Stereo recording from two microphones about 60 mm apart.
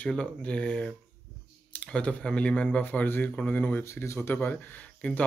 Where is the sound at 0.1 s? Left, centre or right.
Centre.